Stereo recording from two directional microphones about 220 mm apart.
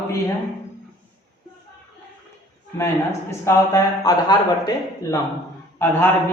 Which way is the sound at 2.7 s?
10° left (ahead or behind).